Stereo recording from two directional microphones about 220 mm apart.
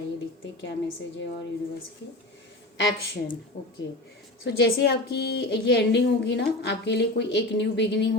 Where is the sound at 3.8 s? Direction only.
50° left (ahead or behind).